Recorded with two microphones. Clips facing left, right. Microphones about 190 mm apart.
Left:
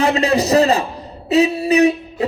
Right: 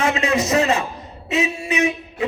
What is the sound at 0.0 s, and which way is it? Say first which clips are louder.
Speech: left 4 dB; 35° left (ahead or behind).